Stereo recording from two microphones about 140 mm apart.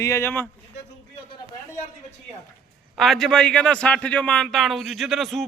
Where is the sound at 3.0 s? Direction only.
Centre (ahead or behind).